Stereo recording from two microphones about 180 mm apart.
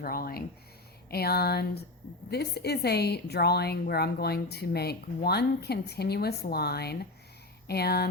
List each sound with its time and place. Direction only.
0.0 s a woman's voice: 55° left (ahead or behind)